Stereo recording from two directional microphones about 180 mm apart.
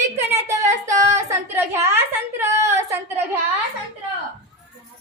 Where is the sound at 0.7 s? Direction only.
40° right (ahead or behind).